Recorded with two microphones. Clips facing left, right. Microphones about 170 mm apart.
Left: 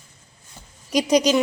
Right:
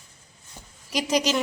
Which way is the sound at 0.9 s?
20° left (ahead or behind).